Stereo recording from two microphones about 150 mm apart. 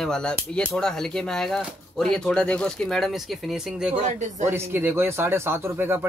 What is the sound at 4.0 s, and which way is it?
Speech, 50° right (ahead or behind).